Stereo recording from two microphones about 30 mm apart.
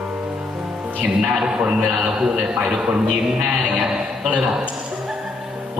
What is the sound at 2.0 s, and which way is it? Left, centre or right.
A man's voice, right.